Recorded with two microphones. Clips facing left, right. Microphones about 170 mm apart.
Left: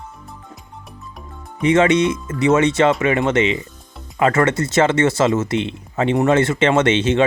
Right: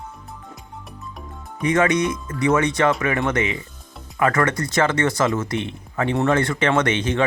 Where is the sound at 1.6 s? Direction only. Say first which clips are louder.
Left 4 dB; 25° left (ahead or behind).